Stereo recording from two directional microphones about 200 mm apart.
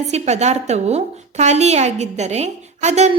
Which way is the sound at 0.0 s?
35° right (ahead or behind).